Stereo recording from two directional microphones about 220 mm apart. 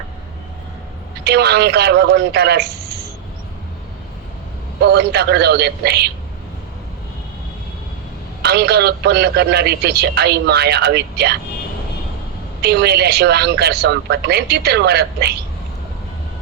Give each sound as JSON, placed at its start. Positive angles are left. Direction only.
{"t": 1.2, "sound": "a man's voice", "side_deg": -45}
{"t": 4.8, "sound": "a man's voice", "side_deg": -50}
{"t": 8.4, "sound": "a man's voice", "side_deg": -45}
{"t": 12.6, "sound": "a man's voice", "side_deg": -50}